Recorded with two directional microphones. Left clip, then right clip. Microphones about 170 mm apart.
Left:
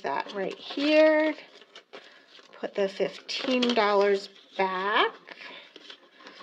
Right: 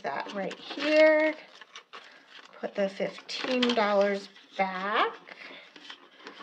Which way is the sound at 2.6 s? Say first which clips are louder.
Left 2 dB; 35° left (ahead or behind).